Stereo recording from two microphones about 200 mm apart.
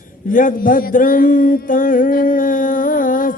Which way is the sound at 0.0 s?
40° left (ahead or behind).